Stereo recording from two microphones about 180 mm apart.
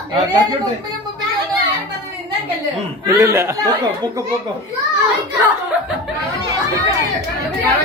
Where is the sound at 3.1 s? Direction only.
15° right (ahead or behind).